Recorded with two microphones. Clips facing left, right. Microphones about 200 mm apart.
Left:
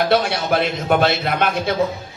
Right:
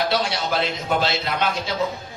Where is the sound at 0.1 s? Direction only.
55° left (ahead or behind).